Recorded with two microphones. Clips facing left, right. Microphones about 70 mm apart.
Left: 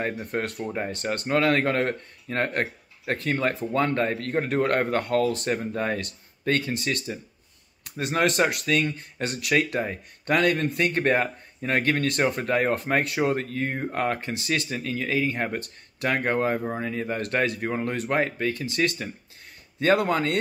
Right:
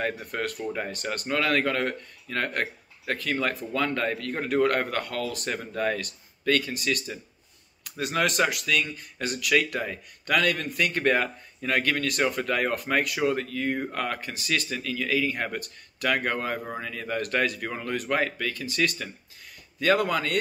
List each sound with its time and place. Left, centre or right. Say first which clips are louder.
0.0 s speech: left 1 dB; left